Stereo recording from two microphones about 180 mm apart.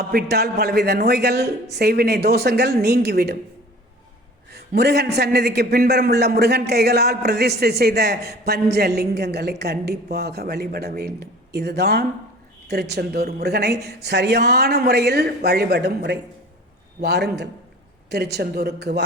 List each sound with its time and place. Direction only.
0.1 s a man's voice: 60° right (ahead or behind)
4.5 s a man's voice: 65° right (ahead or behind)